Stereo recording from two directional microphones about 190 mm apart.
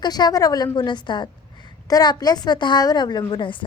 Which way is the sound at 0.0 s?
20° left (ahead or behind).